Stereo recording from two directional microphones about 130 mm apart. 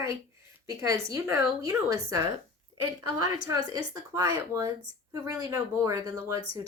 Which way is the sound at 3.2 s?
25° right (ahead or behind).